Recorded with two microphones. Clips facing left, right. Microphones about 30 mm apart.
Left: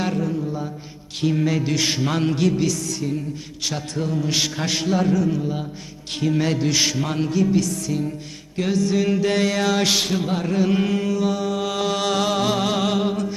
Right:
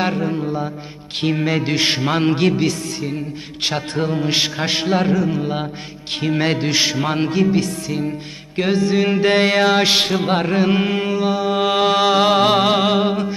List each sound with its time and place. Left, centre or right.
0.0 s mantra: right
1.2 s music: right
10.2 s music: right